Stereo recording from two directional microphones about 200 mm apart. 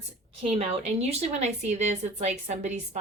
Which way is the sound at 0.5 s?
30° right (ahead or behind).